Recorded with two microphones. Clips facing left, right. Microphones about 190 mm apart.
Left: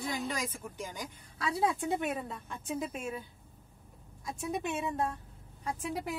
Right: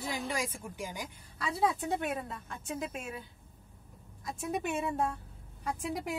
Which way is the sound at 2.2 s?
Centre (ahead or behind).